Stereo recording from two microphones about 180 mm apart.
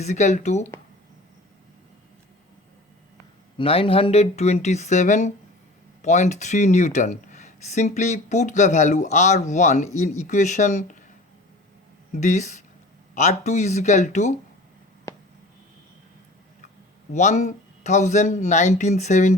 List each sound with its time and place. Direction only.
0.0 s speech: 40° left (ahead or behind)
3.6 s speech: 30° left (ahead or behind)
12.1 s speech: 40° left (ahead or behind)
17.1 s speech: 40° left (ahead or behind)